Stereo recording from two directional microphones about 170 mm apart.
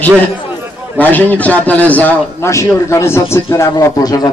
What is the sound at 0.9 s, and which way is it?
A man's voice, 10° left (ahead or behind).